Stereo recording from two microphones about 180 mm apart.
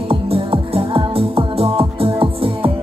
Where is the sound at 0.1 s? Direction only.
30° right (ahead or behind).